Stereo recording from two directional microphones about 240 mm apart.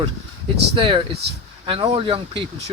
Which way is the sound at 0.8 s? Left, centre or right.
Right.